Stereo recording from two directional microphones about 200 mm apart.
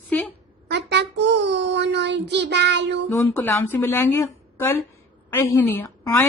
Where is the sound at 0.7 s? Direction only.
60° right (ahead or behind).